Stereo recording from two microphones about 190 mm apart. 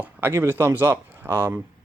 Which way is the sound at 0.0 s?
10° right (ahead or behind).